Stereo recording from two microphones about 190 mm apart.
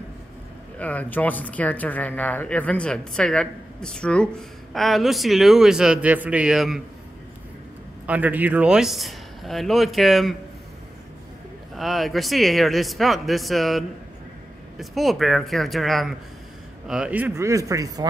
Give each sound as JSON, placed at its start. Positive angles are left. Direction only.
{"t": 0.7, "sound": "speech", "side_deg": 10}
{"t": 8.1, "sound": "speech", "side_deg": -10}
{"t": 11.7, "sound": "speech", "side_deg": 0}